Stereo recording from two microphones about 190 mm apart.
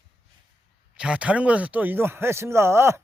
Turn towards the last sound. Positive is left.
turn(degrees=-15)  # may be behind; listen again after turning